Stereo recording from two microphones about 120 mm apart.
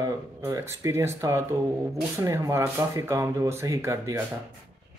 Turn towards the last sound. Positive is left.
turn(degrees=-25)  # may be behind; listen again after turning